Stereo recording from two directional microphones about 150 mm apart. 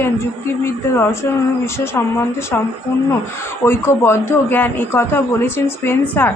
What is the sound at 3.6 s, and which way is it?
A man's voice, 15° left (ahead or behind).